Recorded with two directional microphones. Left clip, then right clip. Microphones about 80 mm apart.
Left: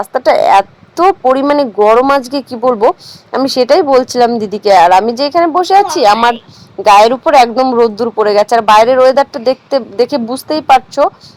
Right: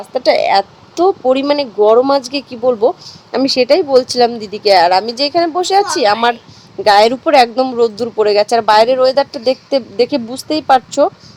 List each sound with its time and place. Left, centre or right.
0.0 s a woman's voice: left
7.8 s speech: left
8.1 s a woman's voice: left